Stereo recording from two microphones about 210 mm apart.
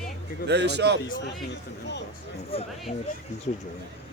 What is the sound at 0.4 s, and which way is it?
Speech, 55° right (ahead or behind).